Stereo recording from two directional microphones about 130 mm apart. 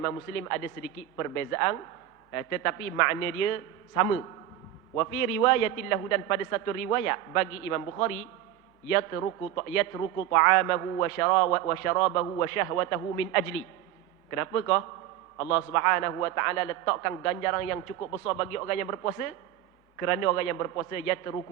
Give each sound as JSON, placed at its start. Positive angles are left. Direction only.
{"t": 0.0, "sound": "a man's voice", "side_deg": 20}